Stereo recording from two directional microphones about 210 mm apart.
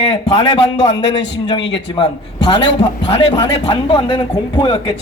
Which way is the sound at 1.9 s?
25° left (ahead or behind).